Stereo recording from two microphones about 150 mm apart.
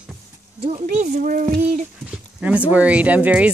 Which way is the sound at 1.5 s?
50° right (ahead or behind).